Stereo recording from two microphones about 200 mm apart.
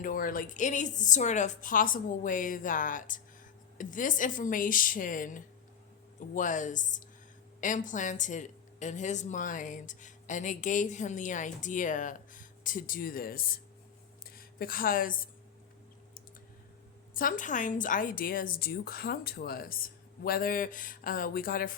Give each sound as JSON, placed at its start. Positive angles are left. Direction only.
{"t": 0.0, "sound": "a woman's voice", "side_deg": 45}
{"t": 17.2, "sound": "a woman's voice", "side_deg": 40}